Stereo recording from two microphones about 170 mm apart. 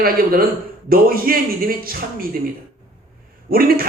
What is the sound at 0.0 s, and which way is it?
A man's voice, 60° right (ahead or behind).